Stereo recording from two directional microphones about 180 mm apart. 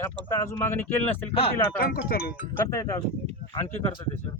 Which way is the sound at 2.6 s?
15° left (ahead or behind).